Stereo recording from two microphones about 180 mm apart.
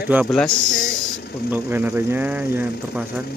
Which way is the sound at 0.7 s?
50° left (ahead or behind).